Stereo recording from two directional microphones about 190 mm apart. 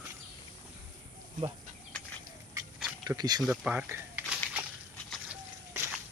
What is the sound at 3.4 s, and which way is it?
Speech, 5° right (ahead or behind).